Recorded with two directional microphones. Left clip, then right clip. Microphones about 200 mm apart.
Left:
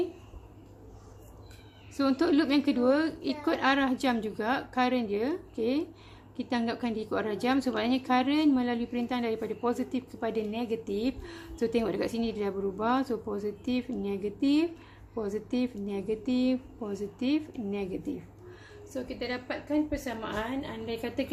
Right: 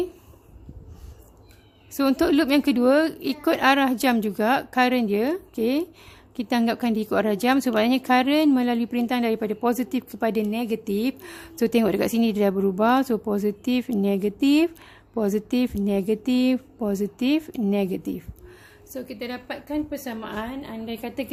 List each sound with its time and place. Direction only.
2.0 s a woman's voice: 50° right (ahead or behind)